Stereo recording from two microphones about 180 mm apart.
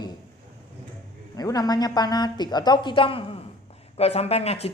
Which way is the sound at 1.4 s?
20° left (ahead or behind).